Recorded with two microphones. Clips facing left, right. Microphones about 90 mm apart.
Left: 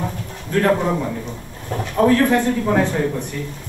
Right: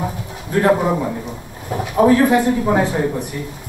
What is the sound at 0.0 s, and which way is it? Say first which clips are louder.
A man's voice: right 2 dB; 15° right (ahead or behind).